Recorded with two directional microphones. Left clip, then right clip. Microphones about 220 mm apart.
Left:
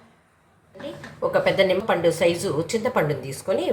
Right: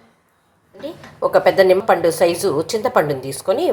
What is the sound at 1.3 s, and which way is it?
A woman's voice, 35° right (ahead or behind).